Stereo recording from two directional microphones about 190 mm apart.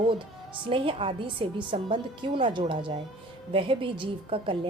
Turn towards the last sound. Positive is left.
turn(degrees=-25)  # may be behind; listen again after turning